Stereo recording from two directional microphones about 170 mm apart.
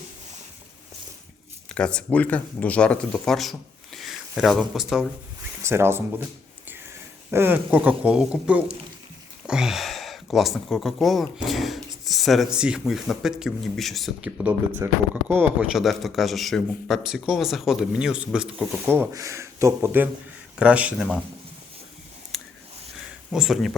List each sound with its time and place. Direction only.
1.7 s speech: 5° left (ahead or behind)
5.6 s speech: 15° right (ahead or behind)
7.3 s speech: 15° right (ahead or behind)
18.9 s speech: 15° right (ahead or behind)
22.3 s a sound: centre (ahead or behind)
23.3 s speech: centre (ahead or behind)